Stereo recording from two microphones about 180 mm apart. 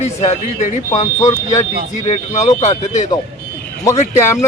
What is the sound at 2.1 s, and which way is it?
A man's voice, 40° left (ahead or behind).